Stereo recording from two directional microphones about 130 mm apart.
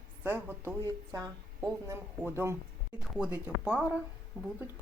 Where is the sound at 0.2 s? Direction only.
15° right (ahead or behind).